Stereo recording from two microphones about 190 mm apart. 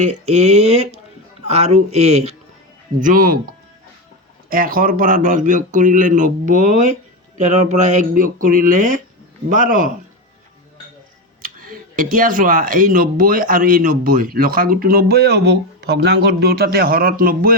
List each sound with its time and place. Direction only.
0.0 s speech: 35° right (ahead or behind)
3.0 s speech: 45° right (ahead or behind)
4.4 s speech: 50° right (ahead or behind)
11.4 s speech: 50° right (ahead or behind)